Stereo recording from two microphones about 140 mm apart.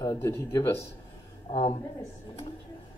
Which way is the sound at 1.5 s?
35° left (ahead or behind).